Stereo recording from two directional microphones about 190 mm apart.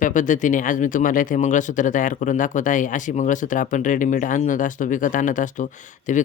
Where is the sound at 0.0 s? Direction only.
40° left (ahead or behind).